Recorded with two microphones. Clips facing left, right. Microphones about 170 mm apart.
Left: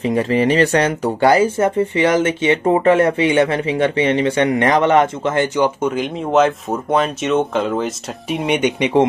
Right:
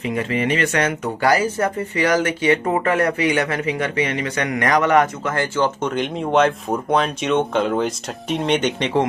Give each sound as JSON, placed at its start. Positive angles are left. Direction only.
{"t": 0.0, "sound": "speech", "side_deg": 35}